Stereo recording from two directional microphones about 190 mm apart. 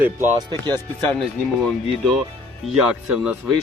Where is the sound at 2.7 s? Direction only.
5° right (ahead or behind).